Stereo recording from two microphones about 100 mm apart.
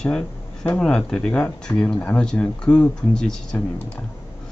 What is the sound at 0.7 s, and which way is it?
Speech, 5° left (ahead or behind).